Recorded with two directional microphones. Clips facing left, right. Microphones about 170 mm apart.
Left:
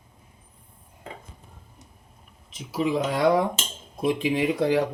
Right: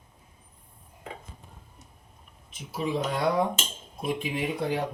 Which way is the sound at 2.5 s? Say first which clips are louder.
Left 5 dB; 90° left.